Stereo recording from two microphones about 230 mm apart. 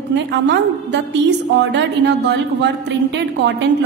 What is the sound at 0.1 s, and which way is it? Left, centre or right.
A woman's voice, right.